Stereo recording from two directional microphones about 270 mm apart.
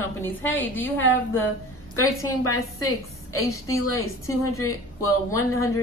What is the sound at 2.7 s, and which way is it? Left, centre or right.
A woman's voice, centre.